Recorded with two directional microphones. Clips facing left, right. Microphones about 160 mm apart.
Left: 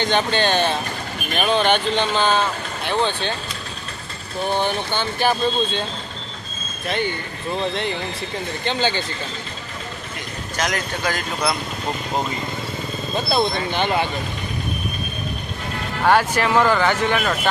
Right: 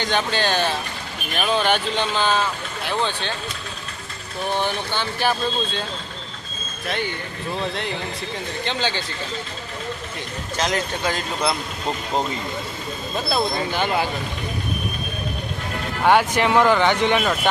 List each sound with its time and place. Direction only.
0.0 s speech: 5° right (ahead or behind)
5.2 s speech: centre (ahead or behind)
6.8 s speech: centre (ahead or behind)
8.6 s speech: centre (ahead or behind)
10.6 s speech: 25° right (ahead or behind)
13.1 s speech: 5° right (ahead or behind)
16.0 s speech: 15° right (ahead or behind)